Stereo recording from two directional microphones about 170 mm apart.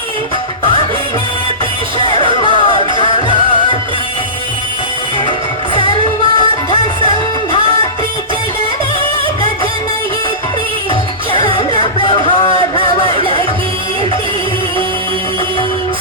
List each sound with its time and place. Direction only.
2.0 s music: 30° left (ahead or behind)
5.7 s music: 30° left (ahead or behind)
11.3 s music: 30° left (ahead or behind)